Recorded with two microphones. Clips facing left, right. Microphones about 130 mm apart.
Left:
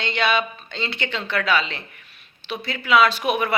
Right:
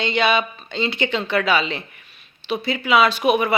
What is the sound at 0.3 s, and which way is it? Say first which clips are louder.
Speech: right 2 dB; 15° right (ahead or behind).